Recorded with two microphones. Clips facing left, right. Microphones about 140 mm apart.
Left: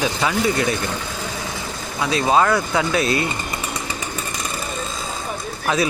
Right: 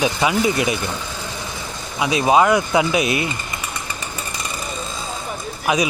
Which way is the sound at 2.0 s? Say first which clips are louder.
Right 2 dB; 20° right (ahead or behind).